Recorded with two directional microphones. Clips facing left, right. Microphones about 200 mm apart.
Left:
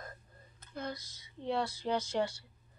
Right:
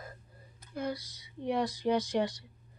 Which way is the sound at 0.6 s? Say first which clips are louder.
Right 5 dB; 10° right (ahead or behind).